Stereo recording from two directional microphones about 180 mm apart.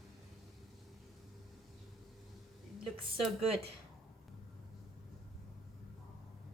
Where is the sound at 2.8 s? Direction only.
Centre (ahead or behind).